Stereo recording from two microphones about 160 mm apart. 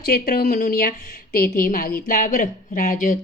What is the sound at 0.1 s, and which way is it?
A woman's voice, 65° left (ahead or behind).